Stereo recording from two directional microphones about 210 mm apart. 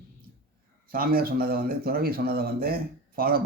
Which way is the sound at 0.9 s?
45° right (ahead or behind).